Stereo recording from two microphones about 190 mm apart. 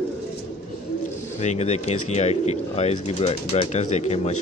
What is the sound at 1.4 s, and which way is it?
Speech, 35° left (ahead or behind).